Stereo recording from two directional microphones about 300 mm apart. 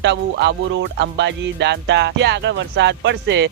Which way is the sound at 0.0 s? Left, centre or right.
Right.